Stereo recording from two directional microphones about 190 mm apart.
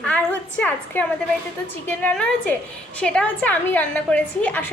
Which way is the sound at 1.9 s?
5° left (ahead or behind).